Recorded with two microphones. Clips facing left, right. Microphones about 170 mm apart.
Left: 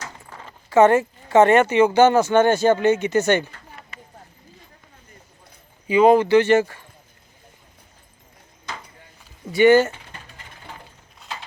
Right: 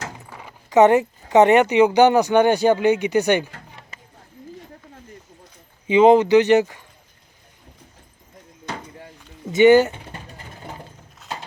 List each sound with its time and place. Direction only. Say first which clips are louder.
0.3 s speech: right 1 dB; 10° right (ahead or behind)
5.9 s speech: right 1 dB; 20° right (ahead or behind)
8.6 s a sound: right 4 dB; 55° right (ahead or behind)
9.5 s speech: right 2 dB; 20° right (ahead or behind)
10.1 s vehicle: right 5 dB; 35° right (ahead or behind)
11.2 s horse: right 3 dB; centre (ahead or behind)